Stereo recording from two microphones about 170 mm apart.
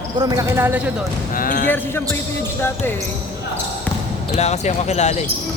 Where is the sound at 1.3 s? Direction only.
55° left (ahead or behind).